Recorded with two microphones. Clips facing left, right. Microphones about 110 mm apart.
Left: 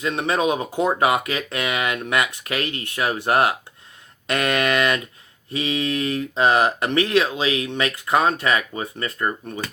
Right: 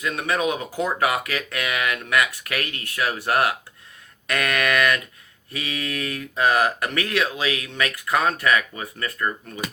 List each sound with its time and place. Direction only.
0.0 s speech: 25° left (ahead or behind)